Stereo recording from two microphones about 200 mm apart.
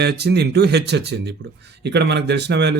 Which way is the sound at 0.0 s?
55° right (ahead or behind).